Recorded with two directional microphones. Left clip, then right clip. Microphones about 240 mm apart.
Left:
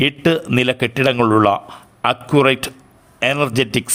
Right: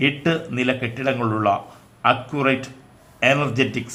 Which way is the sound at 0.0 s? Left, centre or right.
Left.